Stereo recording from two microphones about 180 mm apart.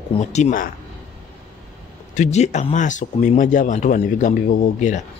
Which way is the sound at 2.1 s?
40° left (ahead or behind).